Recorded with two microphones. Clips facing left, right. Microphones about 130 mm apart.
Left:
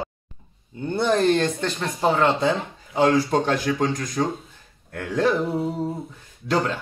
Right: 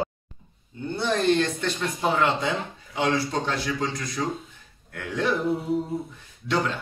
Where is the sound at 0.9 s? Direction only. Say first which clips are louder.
Left 3 dB; 50° left (ahead or behind).